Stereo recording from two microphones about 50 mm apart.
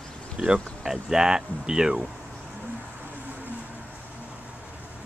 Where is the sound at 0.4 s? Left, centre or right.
Right.